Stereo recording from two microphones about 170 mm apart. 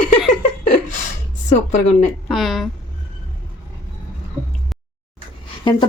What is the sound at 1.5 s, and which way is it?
Speech, 45° left (ahead or behind).